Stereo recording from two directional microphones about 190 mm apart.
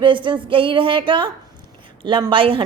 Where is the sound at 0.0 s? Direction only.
25° right (ahead or behind).